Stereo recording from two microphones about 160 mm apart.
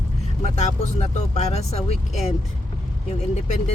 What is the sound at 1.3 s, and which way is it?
Speech, 45° left (ahead or behind).